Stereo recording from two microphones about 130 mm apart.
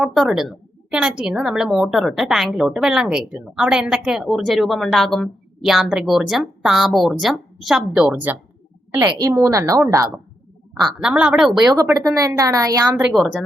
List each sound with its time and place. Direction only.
0.0 s a woman's voice: 5° right (ahead or behind)
9.0 s a woman's voice: 30° right (ahead or behind)
10.8 s a woman's voice: 10° right (ahead or behind)
11.9 s a woman's voice: 25° right (ahead or behind)
13.0 s a woman's voice: 5° right (ahead or behind)